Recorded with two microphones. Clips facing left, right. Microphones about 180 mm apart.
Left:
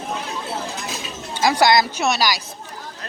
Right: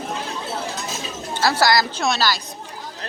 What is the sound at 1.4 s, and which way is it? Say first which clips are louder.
Speech: left 2 dB; 15° left (ahead or behind).